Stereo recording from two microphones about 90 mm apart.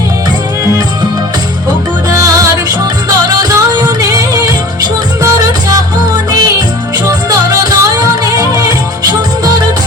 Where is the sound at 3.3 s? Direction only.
45° right (ahead or behind).